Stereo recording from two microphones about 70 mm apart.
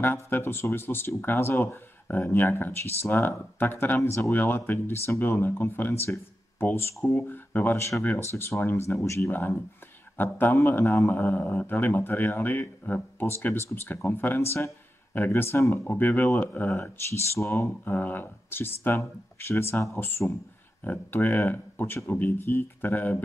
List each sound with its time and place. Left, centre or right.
0.0 s speech: left
8.2 s speech: left
9.0 s speech: left
10.1 s speech: left
17.1 s speech: left
17.8 s speech: left
20.8 s speech: left